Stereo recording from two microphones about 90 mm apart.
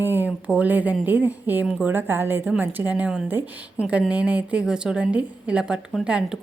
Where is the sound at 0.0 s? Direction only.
20° right (ahead or behind).